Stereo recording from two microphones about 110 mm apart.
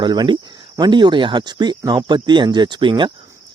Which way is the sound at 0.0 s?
40° right (ahead or behind).